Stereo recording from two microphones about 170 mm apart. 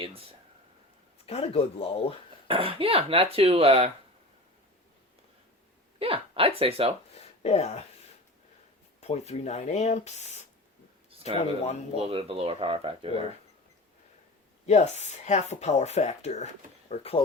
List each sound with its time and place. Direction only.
1.2 s speech: 35° left (ahead or behind)
2.5 s speech: 30° right (ahead or behind)
6.0 s speech: 35° right (ahead or behind)
7.2 s speech: 40° left (ahead or behind)
9.0 s speech: 40° left (ahead or behind)
12.0 s speech: 35° right (ahead or behind)
14.7 s speech: 40° left (ahead or behind)